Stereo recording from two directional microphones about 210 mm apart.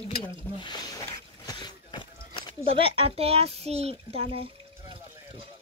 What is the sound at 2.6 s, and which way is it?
A child's voice, 25° right (ahead or behind).